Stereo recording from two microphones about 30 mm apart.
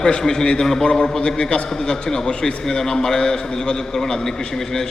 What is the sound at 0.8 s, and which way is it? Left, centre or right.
A man's voice, left.